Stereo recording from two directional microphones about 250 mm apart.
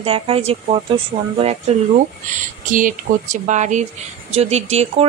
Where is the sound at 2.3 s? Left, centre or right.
Right.